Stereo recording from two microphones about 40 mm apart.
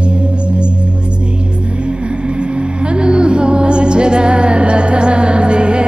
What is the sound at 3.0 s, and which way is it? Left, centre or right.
Music, right.